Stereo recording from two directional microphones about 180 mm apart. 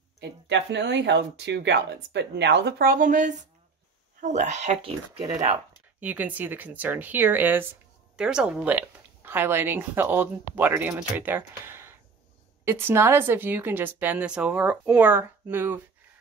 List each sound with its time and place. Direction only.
0.2 s speech: 75° right (ahead or behind); by 5.3 s 35° right (ahead or behind)
5.9 s speech: 10° right (ahead or behind)